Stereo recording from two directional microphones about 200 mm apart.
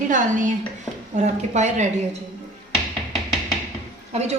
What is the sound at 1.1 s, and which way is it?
Speech, 35° right (ahead or behind).